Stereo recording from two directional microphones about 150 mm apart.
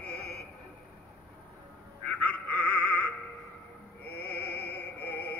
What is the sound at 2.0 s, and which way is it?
Music, 10° left (ahead or behind).